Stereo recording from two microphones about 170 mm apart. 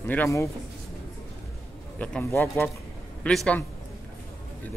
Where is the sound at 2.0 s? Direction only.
10° left (ahead or behind).